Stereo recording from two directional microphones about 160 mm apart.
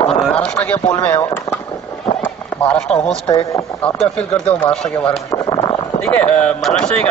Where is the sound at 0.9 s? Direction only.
15° left (ahead or behind).